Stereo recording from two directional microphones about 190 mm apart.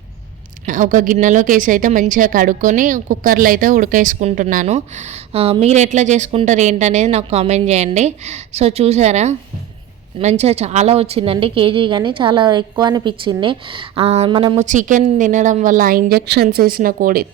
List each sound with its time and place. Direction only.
0.6 s a woman's voice: 40° right (ahead or behind)
14.6 s a woman's voice: 40° right (ahead or behind)